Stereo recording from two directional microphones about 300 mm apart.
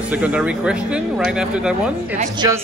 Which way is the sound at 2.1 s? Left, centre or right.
Right.